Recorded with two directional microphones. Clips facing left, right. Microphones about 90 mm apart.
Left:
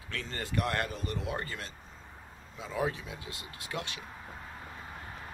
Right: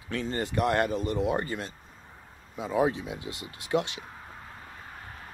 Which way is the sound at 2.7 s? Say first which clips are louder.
Right 7 dB; 20° right (ahead or behind).